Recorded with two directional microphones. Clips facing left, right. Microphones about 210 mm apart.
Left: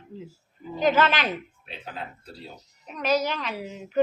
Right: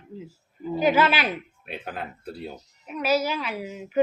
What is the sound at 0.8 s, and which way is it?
Speech, 10° right (ahead or behind).